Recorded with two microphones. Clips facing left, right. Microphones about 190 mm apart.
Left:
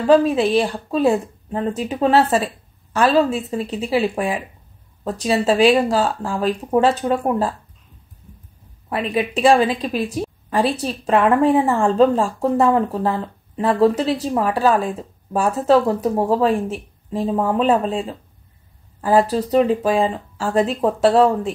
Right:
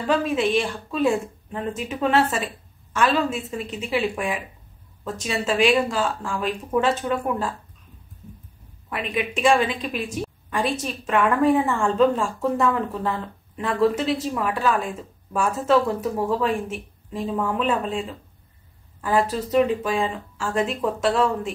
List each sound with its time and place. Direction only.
0.0 s speech: 35° left (ahead or behind)
8.9 s speech: 35° left (ahead or behind)